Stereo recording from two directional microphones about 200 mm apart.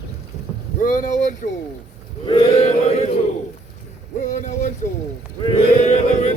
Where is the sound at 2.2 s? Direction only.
30° left (ahead or behind).